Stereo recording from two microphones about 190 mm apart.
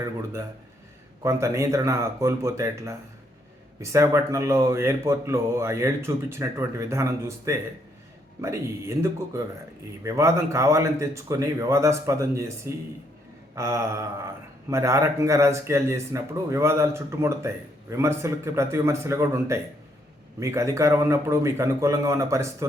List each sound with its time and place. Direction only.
1.2 s speech: 15° right (ahead or behind)